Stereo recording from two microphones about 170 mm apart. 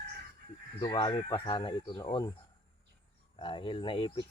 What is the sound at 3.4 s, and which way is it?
Speech, 30° left (ahead or behind).